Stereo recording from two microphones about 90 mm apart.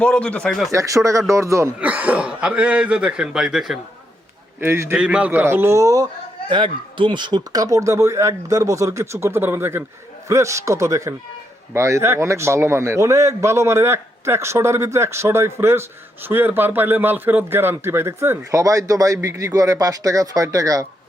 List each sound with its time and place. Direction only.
0.0 s speech: 10° left (ahead or behind)
0.7 s a man's voice: 35° right (ahead or behind)
1.8 s a man's voice: 15° right (ahead or behind)
4.6 s a man's voice: 25° right (ahead or behind)
4.9 s a man's voice: 10° right (ahead or behind); by 6.1 s 40° right (ahead or behind)
6.5 s a man's voice: 65° right (ahead or behind); by 20.8 s 40° right (ahead or behind)